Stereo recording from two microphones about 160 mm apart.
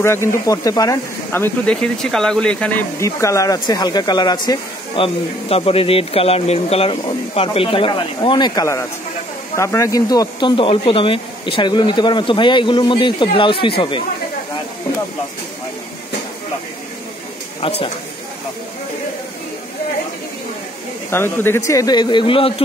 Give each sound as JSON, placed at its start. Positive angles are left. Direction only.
{"t": 0.0, "sound": "speech", "side_deg": 15}
{"t": 3.0, "sound": "speech", "side_deg": 20}
{"t": 17.6, "sound": "speech", "side_deg": 40}
{"t": 21.1, "sound": "speech", "side_deg": 15}